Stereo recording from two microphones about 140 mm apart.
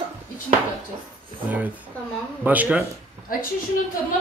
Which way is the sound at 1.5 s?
10° right (ahead or behind).